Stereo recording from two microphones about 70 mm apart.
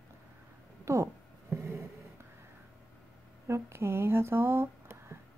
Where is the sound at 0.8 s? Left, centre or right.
Right.